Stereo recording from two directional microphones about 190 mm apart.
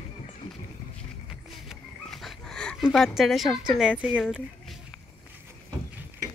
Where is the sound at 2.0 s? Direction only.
5° left (ahead or behind).